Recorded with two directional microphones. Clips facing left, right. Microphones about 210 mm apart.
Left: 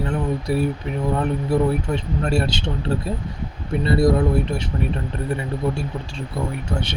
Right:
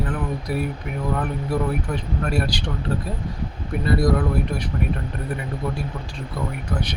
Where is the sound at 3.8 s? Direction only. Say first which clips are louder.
Left 3 dB; 25° left (ahead or behind).